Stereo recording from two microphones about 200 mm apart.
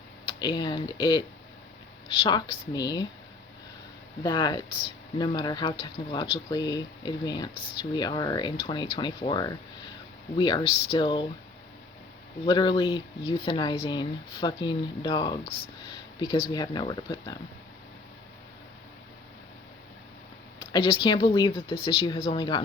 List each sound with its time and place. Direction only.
0.3 s speech: 20° left (ahead or behind)
2.2 s speech: 25° left (ahead or behind)
4.2 s speech: 20° left (ahead or behind)
12.5 s speech: 20° left (ahead or behind)
20.6 s speech: 25° left (ahead or behind)